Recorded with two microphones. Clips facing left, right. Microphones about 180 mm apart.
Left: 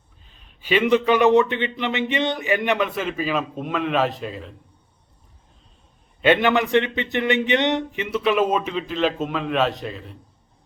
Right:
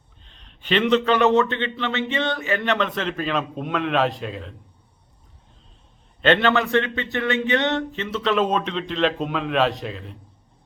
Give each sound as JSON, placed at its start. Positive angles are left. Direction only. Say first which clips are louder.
{"t": 0.3, "sound": "a man's voice", "louder": "left 1 dB", "side_deg": 5}
{"t": 6.2, "sound": "a man's voice", "louder": "left 1 dB", "side_deg": 10}